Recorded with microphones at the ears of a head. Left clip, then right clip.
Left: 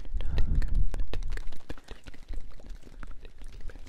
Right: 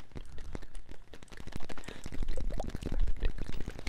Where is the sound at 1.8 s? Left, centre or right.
Right.